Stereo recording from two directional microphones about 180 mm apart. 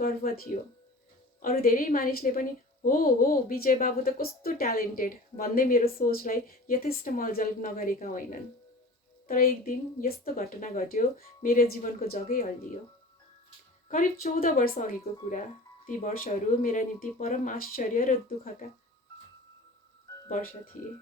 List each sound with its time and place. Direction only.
0.0 s a woman's voice: 55° left (ahead or behind)
13.9 s a woman's voice: 50° left (ahead or behind)
15.9 s a woman's voice: 50° left (ahead or behind)